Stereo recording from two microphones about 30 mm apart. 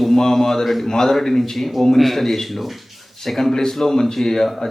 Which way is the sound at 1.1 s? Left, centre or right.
Centre.